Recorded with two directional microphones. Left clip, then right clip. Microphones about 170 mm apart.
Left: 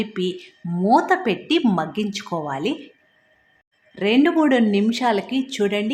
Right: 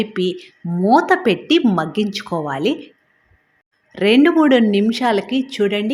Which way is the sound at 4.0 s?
20° right (ahead or behind).